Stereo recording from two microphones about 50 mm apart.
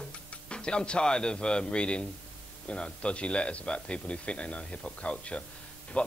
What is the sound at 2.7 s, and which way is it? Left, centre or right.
A man's voice, centre.